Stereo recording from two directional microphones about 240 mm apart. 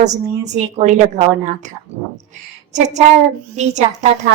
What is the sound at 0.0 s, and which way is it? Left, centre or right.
A woman's voice, right.